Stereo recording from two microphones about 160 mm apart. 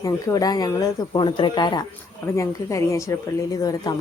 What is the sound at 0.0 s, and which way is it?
Speech, 25° left (ahead or behind).